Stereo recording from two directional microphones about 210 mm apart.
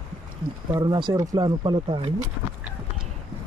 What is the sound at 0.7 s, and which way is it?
Speech, 20° right (ahead or behind).